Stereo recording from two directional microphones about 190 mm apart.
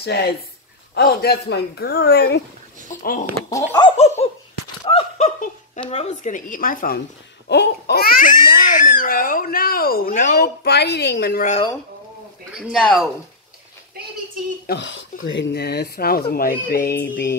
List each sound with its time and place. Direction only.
0.0 s speech: 55° left (ahead or behind)
3.4 s speech: 20° left (ahead or behind)
4.0 s dog: 35° left (ahead or behind)
4.9 s a sound: 35° left (ahead or behind)
5.9 s speech: 35° left (ahead or behind)
7.4 s speech: 60° left (ahead or behind)
12.5 s speech: centre (ahead or behind)
14.7 s speech: 70° left (ahead or behind); by 17.3 s 55° left (ahead or behind)